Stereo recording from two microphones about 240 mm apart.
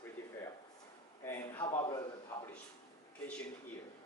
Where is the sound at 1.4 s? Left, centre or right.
Centre.